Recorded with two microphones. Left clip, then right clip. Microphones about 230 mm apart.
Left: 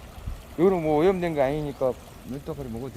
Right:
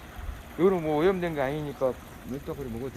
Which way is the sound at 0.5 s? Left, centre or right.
Left.